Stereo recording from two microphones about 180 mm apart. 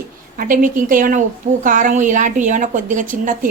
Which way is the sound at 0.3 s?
50° right (ahead or behind).